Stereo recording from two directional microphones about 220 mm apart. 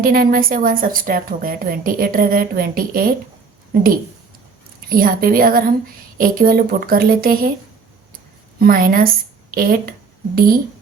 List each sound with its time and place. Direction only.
0.0 s a woman's voice: 40° right (ahead or behind)
4.9 s a woman's voice: 40° right (ahead or behind)
8.5 s a woman's voice: 40° right (ahead or behind)